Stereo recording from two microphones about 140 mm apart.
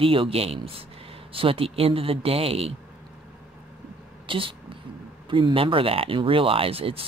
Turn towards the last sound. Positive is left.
turn(degrees=-40)  # may be behind; listen again after turning